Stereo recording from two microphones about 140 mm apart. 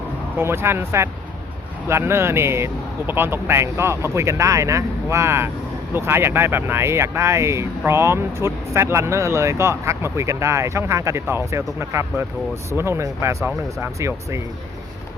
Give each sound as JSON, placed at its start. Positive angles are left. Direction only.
{"t": 0.3, "sound": "speech", "side_deg": -15}